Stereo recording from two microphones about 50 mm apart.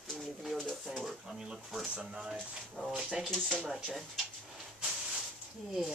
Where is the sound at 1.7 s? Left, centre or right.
Centre.